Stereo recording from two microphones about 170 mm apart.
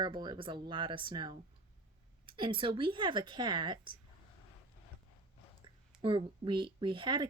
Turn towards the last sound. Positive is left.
turn(degrees=-30)  # may be behind; listen again after turning